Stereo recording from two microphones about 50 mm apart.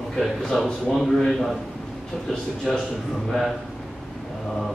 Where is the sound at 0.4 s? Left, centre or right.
Centre.